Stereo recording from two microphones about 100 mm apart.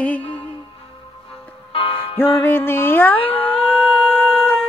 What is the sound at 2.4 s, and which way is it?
Music, 20° left (ahead or behind).